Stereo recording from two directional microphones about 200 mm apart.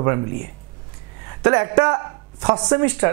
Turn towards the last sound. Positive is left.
turn(degrees=-20)  # may be behind; listen again after turning